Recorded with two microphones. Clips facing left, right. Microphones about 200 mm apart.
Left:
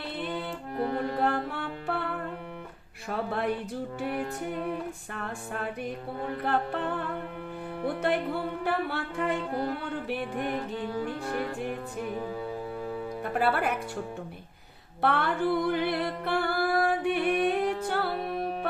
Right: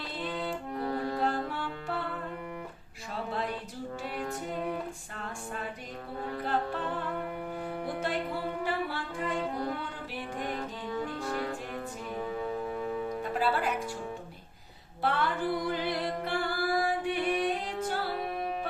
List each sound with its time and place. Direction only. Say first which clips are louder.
0.9 s music: left 2 dB; 60° left (ahead or behind)
3.1 s music: left 5 dB; 60° left (ahead or behind)
5.1 s music: left 3 dB; 60° left (ahead or behind)
8.0 s music: left 5 dB; 60° left (ahead or behind)
13.2 s music: left 4 dB; 60° left (ahead or behind)
15.0 s music: left 3 dB; 60° left (ahead or behind)